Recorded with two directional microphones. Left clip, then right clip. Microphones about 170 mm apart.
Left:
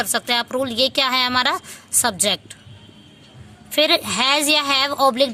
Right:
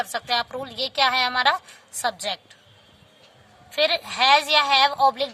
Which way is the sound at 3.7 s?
25° left (ahead or behind).